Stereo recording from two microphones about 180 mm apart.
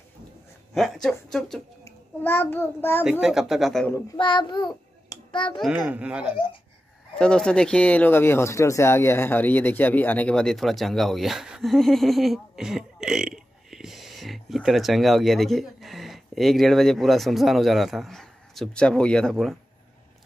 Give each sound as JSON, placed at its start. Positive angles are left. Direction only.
{"t": 0.7, "sound": "a child's voice", "side_deg": 0}
{"t": 3.0, "sound": "speech", "side_deg": -5}
{"t": 4.2, "sound": "a child's voice", "side_deg": 25}
{"t": 5.6, "sound": "a child's voice", "side_deg": -5}
{"t": 7.2, "sound": "speech", "side_deg": 5}